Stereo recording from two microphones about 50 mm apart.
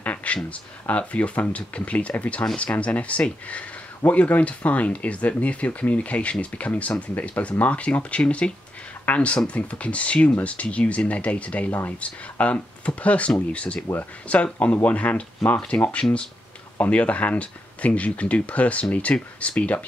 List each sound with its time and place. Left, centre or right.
0.0 s speech: left